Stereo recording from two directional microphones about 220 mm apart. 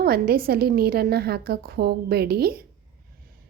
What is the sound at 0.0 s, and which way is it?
A woman's voice, 45° right (ahead or behind).